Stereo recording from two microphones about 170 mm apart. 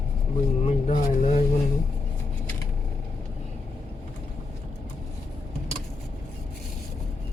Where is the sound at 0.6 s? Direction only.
45° left (ahead or behind).